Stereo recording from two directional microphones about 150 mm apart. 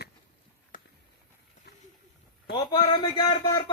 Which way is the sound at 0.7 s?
65° left (ahead or behind).